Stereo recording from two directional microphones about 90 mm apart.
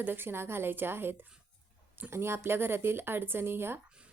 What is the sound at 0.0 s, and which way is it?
A woman's voice, 25° right (ahead or behind).